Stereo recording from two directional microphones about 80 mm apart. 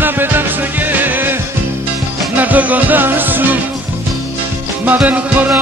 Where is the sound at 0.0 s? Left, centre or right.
Right.